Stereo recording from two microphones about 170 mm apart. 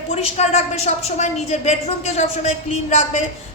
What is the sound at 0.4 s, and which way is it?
A man's voice, 40° left (ahead or behind).